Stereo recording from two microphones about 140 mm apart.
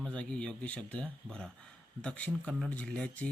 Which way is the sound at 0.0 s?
10° left (ahead or behind).